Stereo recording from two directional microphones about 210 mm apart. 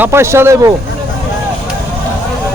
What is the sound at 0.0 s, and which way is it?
Speech, 10° right (ahead or behind).